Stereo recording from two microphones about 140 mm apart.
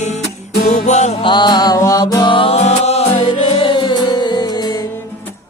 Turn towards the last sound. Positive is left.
turn(degrees=35)  # may be behind; listen again after turning